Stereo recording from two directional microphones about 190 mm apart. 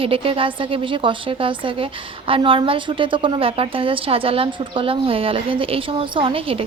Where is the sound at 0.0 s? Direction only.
30° right (ahead or behind).